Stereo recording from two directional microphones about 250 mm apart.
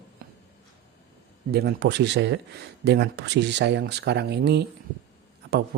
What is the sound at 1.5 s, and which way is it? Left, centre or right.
Speech, right.